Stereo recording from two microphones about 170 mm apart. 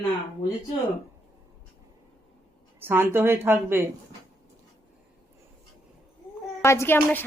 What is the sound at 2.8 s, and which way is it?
A woman's voice, 15° right (ahead or behind).